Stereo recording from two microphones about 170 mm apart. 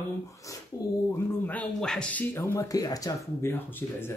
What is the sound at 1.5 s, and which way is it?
Speech, 5° left (ahead or behind).